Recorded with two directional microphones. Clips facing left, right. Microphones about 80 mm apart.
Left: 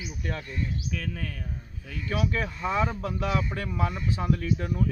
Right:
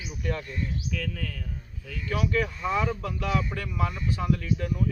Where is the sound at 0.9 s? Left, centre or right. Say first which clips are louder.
Right 1 dB; left.